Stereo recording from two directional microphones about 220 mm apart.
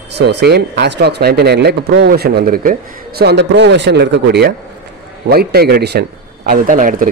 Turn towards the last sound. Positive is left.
turn(degrees=-40)  # may be behind; listen again after turning